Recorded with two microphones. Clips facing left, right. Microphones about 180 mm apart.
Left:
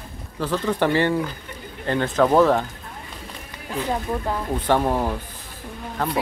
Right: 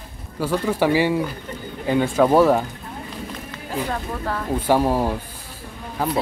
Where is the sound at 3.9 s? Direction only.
15° left (ahead or behind).